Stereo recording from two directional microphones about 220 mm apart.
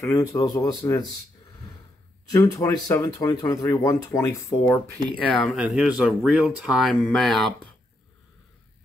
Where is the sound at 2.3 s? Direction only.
15° left (ahead or behind).